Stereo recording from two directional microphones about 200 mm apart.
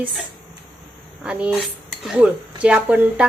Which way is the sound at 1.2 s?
5° right (ahead or behind).